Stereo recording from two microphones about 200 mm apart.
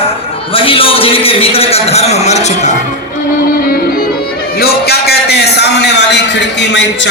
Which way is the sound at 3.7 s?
45° left (ahead or behind).